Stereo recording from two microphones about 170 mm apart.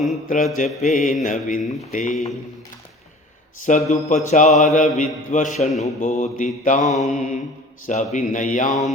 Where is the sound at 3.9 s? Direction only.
45° left (ahead or behind).